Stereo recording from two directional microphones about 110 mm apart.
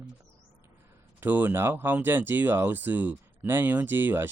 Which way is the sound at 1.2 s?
15° right (ahead or behind).